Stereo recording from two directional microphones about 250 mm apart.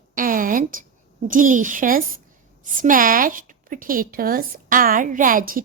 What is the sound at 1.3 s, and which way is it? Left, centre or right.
A woman's voice, right.